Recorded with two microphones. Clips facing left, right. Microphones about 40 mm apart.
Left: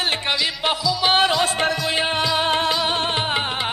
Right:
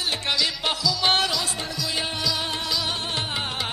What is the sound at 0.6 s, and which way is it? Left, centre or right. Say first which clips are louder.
Music: left 4 dB; centre.